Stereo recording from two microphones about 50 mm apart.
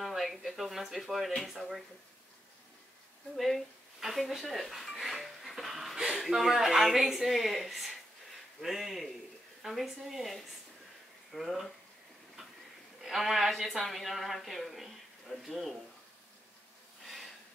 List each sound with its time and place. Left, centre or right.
0.0 s speech: centre
3.3 s speech: centre
13.0 s speech: centre
17.0 s a sound: centre